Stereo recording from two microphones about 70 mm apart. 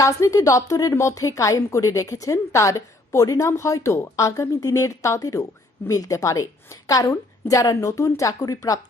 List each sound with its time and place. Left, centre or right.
0.0 s a woman's voice: left